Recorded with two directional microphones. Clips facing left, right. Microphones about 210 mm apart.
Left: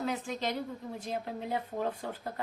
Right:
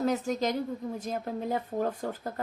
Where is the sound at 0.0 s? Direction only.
40° right (ahead or behind).